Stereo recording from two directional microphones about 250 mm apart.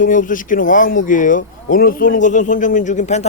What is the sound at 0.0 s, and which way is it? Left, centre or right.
Speech, left.